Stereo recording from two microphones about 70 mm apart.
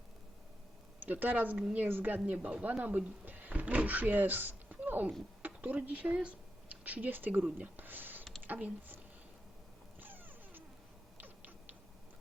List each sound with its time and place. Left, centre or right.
1.0 s speech: right
10.0 s a sound: right
11.2 s tick-tock: right